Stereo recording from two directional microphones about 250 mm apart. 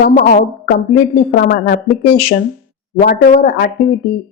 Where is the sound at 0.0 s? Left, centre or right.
Left.